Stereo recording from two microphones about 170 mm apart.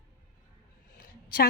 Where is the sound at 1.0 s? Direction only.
60° left (ahead or behind).